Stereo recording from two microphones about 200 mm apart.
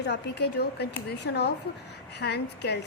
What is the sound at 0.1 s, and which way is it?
A woman's voice, 55° left (ahead or behind).